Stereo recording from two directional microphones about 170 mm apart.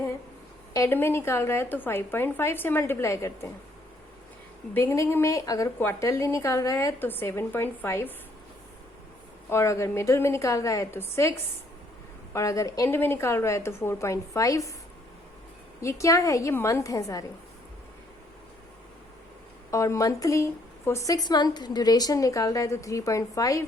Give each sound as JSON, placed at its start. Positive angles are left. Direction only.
{"t": 0.7, "sound": "a woman's voice", "side_deg": 15}
{"t": 4.7, "sound": "a woman's voice", "side_deg": 15}
{"t": 9.5, "sound": "a woman's voice", "side_deg": 15}
{"t": 15.8, "sound": "a woman's voice", "side_deg": 20}
{"t": 19.7, "sound": "a woman's voice", "side_deg": 20}